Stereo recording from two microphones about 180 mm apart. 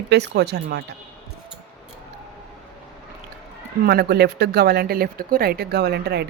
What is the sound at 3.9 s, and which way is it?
Speech, 65° right (ahead or behind).